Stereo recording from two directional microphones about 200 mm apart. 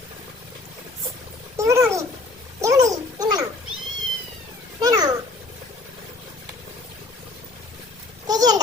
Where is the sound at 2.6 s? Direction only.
15° right (ahead or behind).